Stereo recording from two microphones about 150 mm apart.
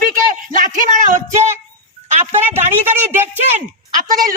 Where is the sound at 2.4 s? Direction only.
15° right (ahead or behind).